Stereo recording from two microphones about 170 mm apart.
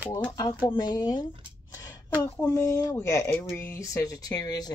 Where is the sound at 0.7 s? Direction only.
25° left (ahead or behind).